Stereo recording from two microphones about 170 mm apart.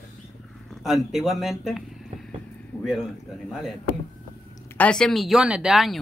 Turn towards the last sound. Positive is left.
turn(degrees=0)  # may be behind; listen again after turning